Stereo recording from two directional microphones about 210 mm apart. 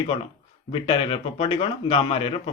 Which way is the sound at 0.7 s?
25° left (ahead or behind).